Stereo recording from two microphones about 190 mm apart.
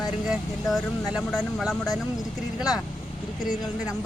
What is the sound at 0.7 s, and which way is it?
Speech, centre (ahead or behind).